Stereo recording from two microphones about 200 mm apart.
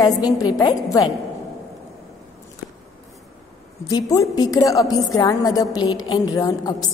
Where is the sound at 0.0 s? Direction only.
20° left (ahead or behind).